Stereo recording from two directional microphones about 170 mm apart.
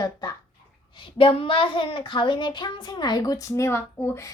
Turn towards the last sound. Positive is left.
turn(degrees=15)  # may be behind; listen again after turning